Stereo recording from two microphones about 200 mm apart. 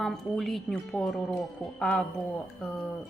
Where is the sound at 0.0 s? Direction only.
Centre (ahead or behind).